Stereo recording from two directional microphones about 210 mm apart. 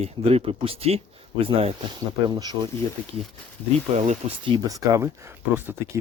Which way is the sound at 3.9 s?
30° right (ahead or behind).